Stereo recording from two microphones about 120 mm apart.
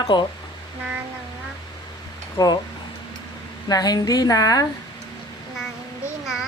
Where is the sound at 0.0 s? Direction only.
40° left (ahead or behind).